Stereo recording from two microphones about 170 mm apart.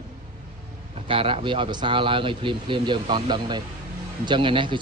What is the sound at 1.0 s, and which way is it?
Speech, 30° right (ahead or behind).